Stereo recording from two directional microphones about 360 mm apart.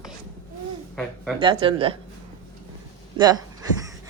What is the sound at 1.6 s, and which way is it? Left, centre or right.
Speech, centre.